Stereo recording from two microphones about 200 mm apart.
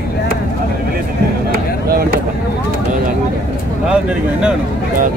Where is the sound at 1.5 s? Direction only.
45° right (ahead or behind).